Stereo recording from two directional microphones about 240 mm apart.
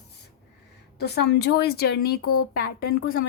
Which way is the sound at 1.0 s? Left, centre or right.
Left.